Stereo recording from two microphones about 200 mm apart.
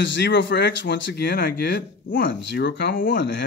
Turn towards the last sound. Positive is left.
turn(degrees=50)  # may be behind; listen again after turning